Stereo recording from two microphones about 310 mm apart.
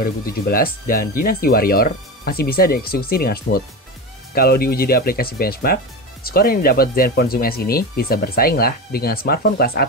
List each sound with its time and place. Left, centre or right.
0.0 s speech: left